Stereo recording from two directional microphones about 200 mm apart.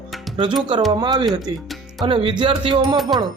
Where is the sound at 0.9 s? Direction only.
20° right (ahead or behind).